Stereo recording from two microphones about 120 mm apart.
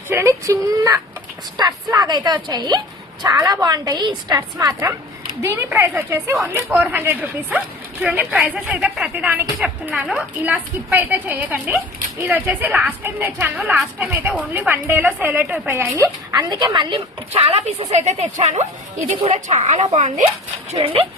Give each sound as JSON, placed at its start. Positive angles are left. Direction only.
{"t": 0.1, "sound": "a woman's voice", "side_deg": -25}
{"t": 8.3, "sound": "speech", "side_deg": -5}
{"t": 10.9, "sound": "speech", "side_deg": -15}
{"t": 16.0, "sound": "a woman's voice", "side_deg": -30}
{"t": 17.3, "sound": "speech", "side_deg": -60}
{"t": 20.7, "sound": "speech", "side_deg": -50}